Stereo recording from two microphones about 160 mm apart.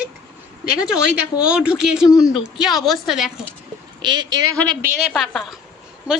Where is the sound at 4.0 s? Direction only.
25° right (ahead or behind).